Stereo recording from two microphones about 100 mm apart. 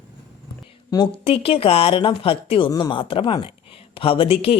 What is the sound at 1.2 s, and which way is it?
A woman's voice, 70° left (ahead or behind).